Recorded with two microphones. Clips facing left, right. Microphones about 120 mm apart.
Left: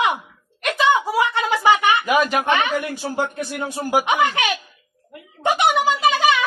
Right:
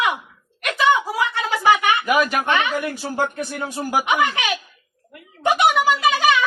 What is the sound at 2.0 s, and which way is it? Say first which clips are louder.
Speech: left 1 dB; 20° left (ahead or behind).